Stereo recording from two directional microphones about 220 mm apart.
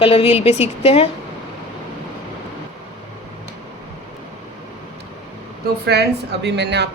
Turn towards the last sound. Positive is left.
turn(degrees=-50)  # may be behind; listen again after turning